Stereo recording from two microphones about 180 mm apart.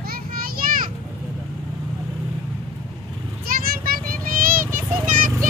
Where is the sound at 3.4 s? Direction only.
55° right (ahead or behind).